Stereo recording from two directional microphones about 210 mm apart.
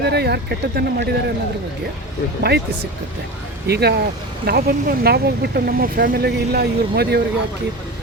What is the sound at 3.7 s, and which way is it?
Speech, 50° right (ahead or behind).